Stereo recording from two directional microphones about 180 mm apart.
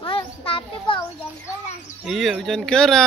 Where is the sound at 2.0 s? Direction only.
Centre (ahead or behind).